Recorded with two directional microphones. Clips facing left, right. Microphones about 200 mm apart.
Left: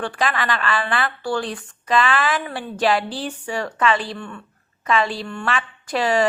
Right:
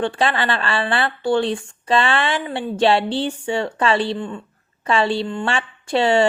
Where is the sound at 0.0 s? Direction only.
25° right (ahead or behind).